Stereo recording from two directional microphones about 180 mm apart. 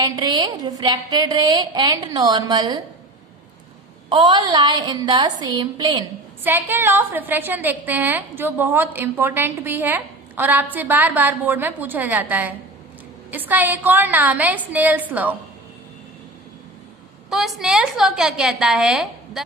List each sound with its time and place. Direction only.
0.0 s a woman's voice: 25° right (ahead or behind)
4.1 s a woman's voice: 25° right (ahead or behind)
6.4 s a woman's voice: 10° right (ahead or behind)
17.2 s a woman's voice: centre (ahead or behind)